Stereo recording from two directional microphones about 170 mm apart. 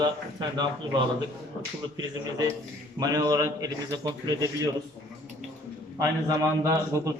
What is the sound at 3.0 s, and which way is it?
A man's voice, 20° right (ahead or behind).